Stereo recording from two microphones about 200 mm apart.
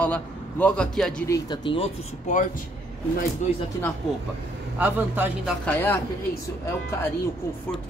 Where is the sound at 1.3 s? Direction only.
20° left (ahead or behind).